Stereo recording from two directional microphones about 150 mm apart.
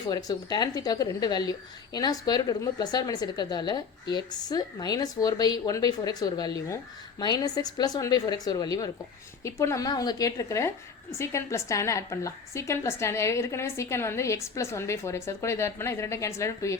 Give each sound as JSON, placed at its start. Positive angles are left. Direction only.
{"t": 0.0, "sound": "a woman's voice", "side_deg": 25}